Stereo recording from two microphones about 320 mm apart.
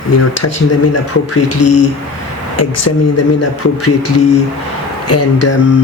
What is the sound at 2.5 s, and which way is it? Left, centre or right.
Speech, left.